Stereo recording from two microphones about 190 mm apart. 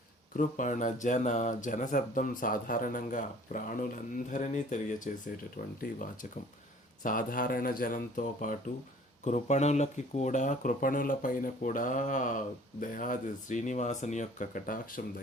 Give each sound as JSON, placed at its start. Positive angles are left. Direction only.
{"t": 0.3, "sound": "speech", "side_deg": 40}
{"t": 7.0, "sound": "speech", "side_deg": 45}